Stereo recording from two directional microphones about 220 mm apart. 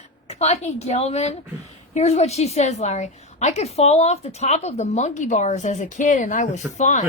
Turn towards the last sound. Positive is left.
turn(degrees=30)  # may be behind; listen again after turning